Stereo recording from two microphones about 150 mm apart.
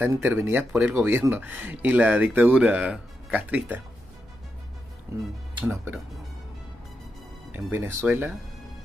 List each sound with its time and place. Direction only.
0.0 s speech: 15° right (ahead or behind)
5.1 s speech: 20° right (ahead or behind)
7.5 s speech: 15° right (ahead or behind)